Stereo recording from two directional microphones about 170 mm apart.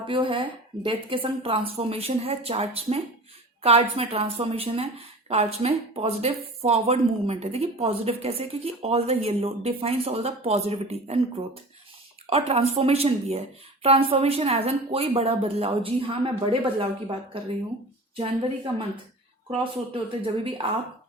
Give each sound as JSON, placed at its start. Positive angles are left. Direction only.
{"t": 0.0, "sound": "speech", "side_deg": -30}
{"t": 12.3, "sound": "speech", "side_deg": -35}